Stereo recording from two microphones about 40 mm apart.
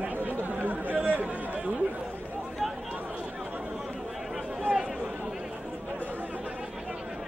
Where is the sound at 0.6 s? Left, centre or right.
Right.